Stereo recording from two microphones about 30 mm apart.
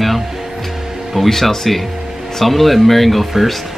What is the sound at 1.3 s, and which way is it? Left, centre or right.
Speech, centre.